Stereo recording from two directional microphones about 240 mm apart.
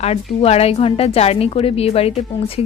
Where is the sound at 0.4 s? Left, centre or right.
Left.